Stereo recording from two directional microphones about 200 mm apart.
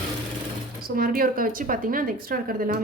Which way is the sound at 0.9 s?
45° right (ahead or behind).